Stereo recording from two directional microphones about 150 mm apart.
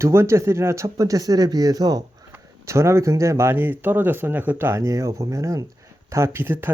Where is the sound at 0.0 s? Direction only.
15° right (ahead or behind).